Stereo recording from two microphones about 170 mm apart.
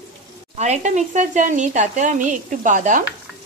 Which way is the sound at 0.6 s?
40° right (ahead or behind).